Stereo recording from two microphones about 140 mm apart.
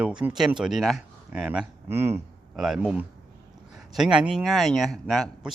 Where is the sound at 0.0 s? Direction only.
10° right (ahead or behind).